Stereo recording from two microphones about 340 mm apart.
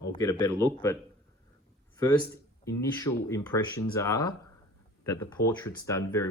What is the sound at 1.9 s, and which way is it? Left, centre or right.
Speech, centre.